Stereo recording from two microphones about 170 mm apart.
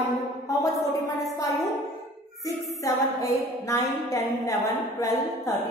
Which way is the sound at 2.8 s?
20° left (ahead or behind).